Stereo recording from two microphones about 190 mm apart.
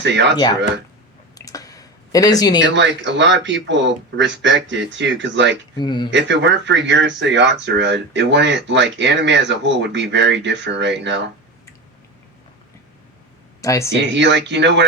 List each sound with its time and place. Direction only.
0.0 s speech: 65° right (ahead or behind)
1.4 s a sound: 20° left (ahead or behind)
2.6 s speech: 70° right (ahead or behind)
5.7 s speech: 25° left (ahead or behind)
6.1 s speech: 70° right (ahead or behind)
13.6 s speech: 15° left (ahead or behind)
13.9 s speech: 70° right (ahead or behind)